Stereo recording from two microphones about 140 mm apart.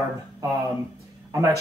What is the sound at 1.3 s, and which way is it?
Speech, 20° right (ahead or behind).